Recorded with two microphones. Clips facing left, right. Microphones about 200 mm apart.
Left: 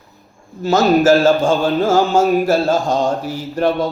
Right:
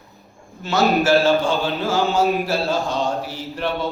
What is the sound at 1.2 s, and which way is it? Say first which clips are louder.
Mantra: left 5 dB; 45° left (ahead or behind).